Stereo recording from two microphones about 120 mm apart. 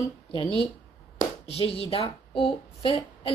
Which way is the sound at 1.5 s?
55° left (ahead or behind).